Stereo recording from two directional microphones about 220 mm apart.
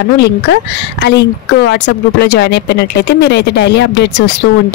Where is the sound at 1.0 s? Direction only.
50° left (ahead or behind).